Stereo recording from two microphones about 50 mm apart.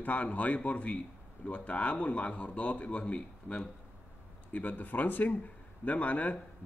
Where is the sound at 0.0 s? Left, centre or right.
Left.